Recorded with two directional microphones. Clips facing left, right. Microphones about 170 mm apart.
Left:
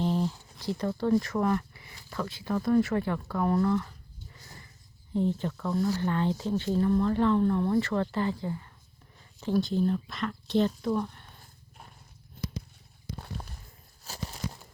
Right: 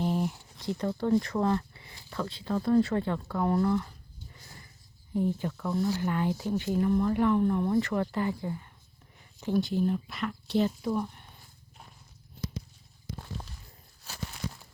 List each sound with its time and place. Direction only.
0.0 s speech: 10° right (ahead or behind)
5.1 s speech: 10° right (ahead or behind)